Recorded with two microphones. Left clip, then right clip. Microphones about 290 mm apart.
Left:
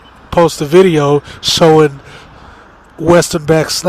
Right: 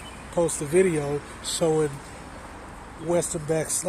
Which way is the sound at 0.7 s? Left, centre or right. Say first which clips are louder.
Left 14 dB; left.